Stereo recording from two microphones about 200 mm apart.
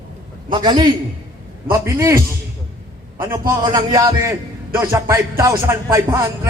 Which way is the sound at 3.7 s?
15° right (ahead or behind).